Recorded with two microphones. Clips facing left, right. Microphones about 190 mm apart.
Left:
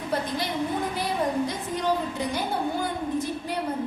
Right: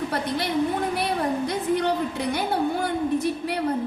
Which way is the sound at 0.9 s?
65° right (ahead or behind).